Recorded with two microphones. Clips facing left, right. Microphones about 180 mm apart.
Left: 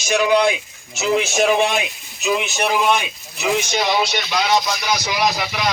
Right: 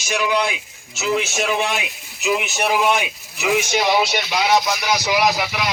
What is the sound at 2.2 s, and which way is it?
A man's voice, 5° right (ahead or behind).